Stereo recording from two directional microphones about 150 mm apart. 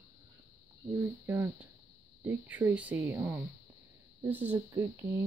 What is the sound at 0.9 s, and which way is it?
Speech, 15° right (ahead or behind).